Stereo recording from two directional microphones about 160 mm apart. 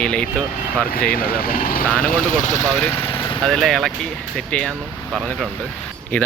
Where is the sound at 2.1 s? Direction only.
55° left (ahead or behind).